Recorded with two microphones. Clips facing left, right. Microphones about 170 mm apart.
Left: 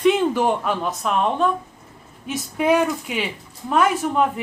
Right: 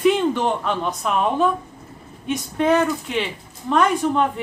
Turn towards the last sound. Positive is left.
turn(degrees=5)  # may be behind; listen again after turning